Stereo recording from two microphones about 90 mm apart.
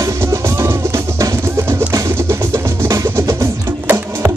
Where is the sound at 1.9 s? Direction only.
35° right (ahead or behind).